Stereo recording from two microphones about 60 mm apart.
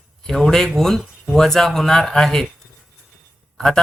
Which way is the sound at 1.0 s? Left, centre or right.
Centre.